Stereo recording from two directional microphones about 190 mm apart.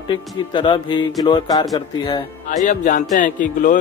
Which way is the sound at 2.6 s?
40° left (ahead or behind).